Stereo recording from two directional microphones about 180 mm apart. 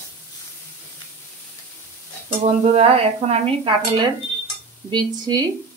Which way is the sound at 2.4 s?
35° right (ahead or behind).